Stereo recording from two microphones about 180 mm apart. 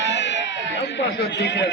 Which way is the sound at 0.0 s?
75° left (ahead or behind).